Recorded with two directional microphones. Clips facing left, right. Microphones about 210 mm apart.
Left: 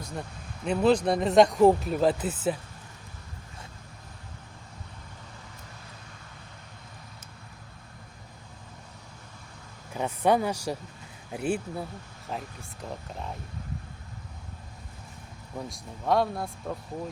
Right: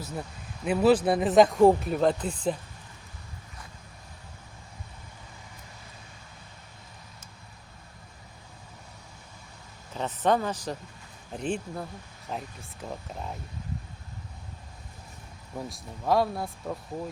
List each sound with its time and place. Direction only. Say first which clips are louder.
0.0 s speech: right 1 dB; 5° right (ahead or behind)
9.9 s a sound: left 1 dB; 10° left (ahead or behind)
11.3 s speech: left 2 dB; 10° left (ahead or behind)
15.5 s speech: even; centre (ahead or behind)